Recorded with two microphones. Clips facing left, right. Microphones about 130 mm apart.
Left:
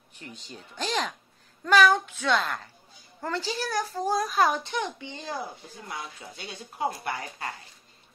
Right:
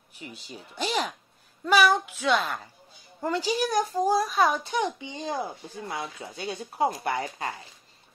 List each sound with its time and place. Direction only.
0.1 s speech: 5° right (ahead or behind)
4.7 s speech: 15° right (ahead or behind)